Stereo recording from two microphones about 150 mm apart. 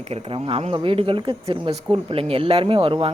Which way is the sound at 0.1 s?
35° right (ahead or behind).